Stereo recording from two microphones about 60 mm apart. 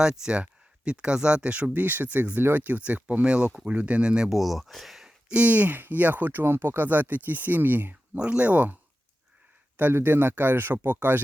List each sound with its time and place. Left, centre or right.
0.0 s speech: centre
4.3 s speech: centre
5.3 s speech: right
8.2 s speech: right